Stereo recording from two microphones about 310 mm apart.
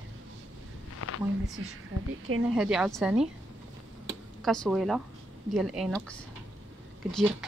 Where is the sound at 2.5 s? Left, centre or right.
Centre.